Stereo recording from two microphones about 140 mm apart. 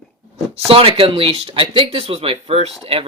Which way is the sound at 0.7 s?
40° right (ahead or behind).